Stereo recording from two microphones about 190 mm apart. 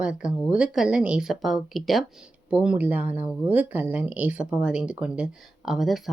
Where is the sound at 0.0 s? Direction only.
5° right (ahead or behind).